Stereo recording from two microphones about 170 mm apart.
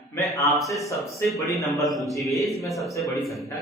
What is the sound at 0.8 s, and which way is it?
Speech, 15° left (ahead or behind).